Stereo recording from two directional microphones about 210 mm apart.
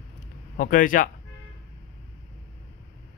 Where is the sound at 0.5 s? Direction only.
40° left (ahead or behind).